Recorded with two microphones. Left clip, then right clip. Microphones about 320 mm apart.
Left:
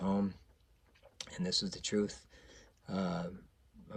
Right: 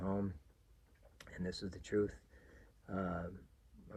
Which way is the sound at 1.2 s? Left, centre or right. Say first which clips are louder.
Left 9 dB; right.